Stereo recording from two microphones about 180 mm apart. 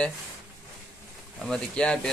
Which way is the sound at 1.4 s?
5° left (ahead or behind).